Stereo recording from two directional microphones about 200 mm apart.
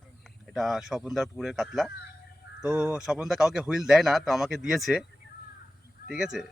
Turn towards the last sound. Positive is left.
turn(degrees=-5)  # may be behind; listen again after turning